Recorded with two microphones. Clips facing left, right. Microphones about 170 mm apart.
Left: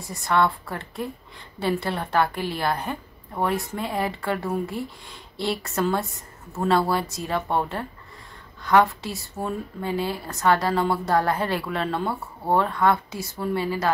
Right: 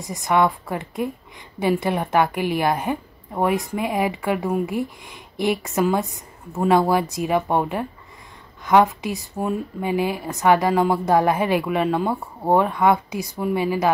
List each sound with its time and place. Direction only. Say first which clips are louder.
0.0 s a woman's voice: right 3 dB; 15° right (ahead or behind)